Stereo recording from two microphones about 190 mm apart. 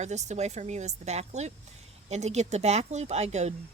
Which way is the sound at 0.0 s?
35° right (ahead or behind).